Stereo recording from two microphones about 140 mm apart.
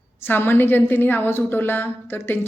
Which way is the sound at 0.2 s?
15° left (ahead or behind).